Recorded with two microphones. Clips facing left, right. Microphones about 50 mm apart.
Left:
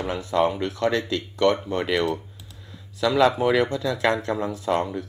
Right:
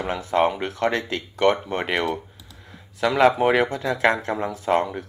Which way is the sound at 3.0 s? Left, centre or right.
Right.